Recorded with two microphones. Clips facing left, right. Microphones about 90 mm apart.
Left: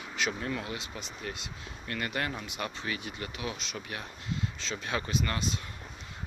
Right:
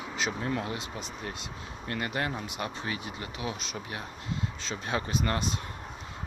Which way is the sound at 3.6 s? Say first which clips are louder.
Right 2 dB; 40° right (ahead or behind).